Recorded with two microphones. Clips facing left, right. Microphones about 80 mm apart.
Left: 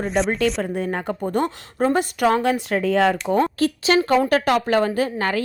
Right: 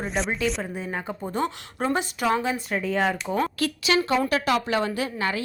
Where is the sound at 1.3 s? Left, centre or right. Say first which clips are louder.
Left 4 dB; left.